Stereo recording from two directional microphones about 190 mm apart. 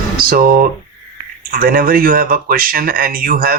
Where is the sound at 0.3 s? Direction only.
50° right (ahead or behind).